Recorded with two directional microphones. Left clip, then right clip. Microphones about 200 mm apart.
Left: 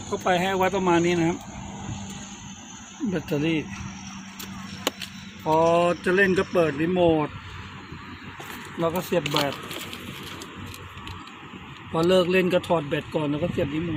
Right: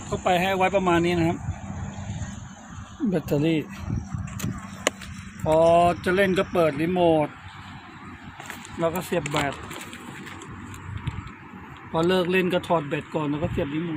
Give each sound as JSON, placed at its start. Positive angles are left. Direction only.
{"t": 0.3, "sound": "speech", "side_deg": -25}
{"t": 3.1, "sound": "speech", "side_deg": -45}
{"t": 5.5, "sound": "speech", "side_deg": -35}
{"t": 8.8, "sound": "speech", "side_deg": -5}
{"t": 11.9, "sound": "speech", "side_deg": -15}